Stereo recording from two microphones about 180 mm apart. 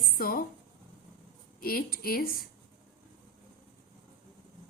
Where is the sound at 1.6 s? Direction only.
55° left (ahead or behind).